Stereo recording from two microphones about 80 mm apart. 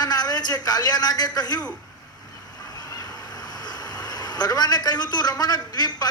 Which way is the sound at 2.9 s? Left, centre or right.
Left.